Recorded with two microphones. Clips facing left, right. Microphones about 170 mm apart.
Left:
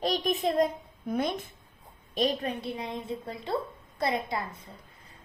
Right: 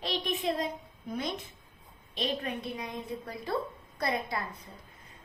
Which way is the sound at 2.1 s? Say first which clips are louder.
Left 5 dB; 40° left (ahead or behind).